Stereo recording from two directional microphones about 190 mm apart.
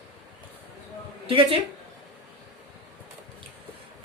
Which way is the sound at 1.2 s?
30° right (ahead or behind).